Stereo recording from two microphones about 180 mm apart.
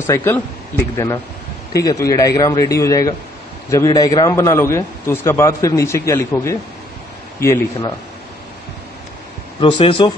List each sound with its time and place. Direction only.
0.0 s a man's voice: 15° left (ahead or behind)
9.6 s speech: 30° left (ahead or behind)